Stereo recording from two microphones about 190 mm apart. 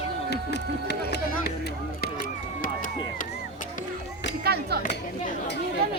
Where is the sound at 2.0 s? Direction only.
45° left (ahead or behind).